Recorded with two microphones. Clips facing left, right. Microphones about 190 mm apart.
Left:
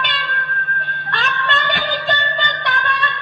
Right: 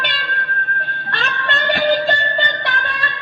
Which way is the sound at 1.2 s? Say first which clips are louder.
Left 1 dB; 30° right (ahead or behind).